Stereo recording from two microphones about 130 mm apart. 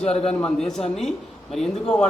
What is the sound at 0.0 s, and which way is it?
Speech, 55° left (ahead or behind).